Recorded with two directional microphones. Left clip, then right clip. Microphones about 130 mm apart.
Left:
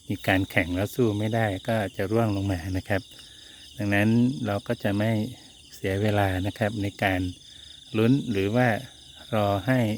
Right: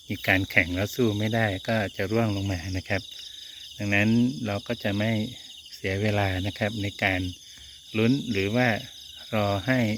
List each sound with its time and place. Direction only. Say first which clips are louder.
0.1 s speech: right 1 dB; 40° left (ahead or behind)